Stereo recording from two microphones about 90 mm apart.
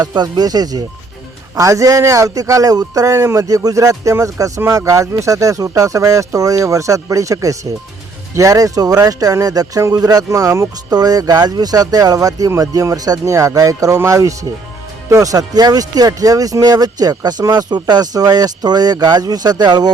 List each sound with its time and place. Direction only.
0.0 s speech: 50° right (ahead or behind); by 10.9 s 35° right (ahead or behind)
10.9 s speech: 45° right (ahead or behind)